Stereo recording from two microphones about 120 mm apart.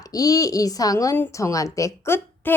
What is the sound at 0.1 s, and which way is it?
A woman's voice, 30° left (ahead or behind).